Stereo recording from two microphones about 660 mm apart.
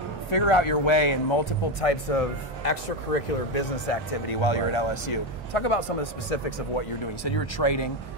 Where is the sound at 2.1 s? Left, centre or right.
Left.